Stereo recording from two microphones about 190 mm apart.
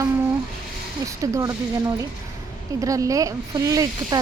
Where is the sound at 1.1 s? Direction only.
15° right (ahead or behind).